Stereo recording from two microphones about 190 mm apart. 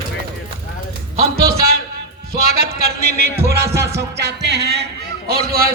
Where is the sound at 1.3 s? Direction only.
55° right (ahead or behind).